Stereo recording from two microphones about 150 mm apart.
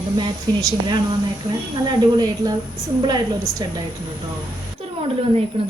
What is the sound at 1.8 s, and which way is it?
A woman's voice, 30° right (ahead or behind).